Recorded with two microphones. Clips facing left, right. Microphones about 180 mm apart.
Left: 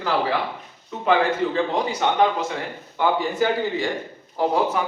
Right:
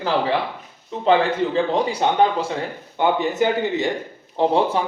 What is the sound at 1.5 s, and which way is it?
A man's voice, 30° right (ahead or behind).